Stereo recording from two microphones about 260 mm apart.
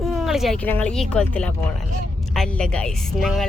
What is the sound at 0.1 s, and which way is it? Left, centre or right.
A woman's voice, centre.